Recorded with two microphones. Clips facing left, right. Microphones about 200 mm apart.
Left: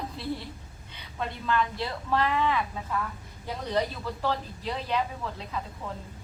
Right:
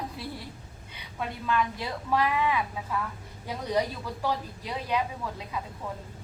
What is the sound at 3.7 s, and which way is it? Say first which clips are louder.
Speech: even; 10° right (ahead or behind).